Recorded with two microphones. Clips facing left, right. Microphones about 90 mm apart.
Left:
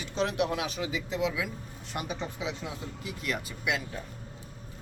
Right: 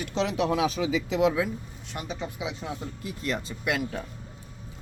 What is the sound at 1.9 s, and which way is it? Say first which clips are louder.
Speech: even; 5° left (ahead or behind).